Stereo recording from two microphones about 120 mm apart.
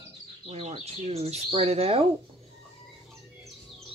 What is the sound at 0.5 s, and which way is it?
Speech, 55° right (ahead or behind).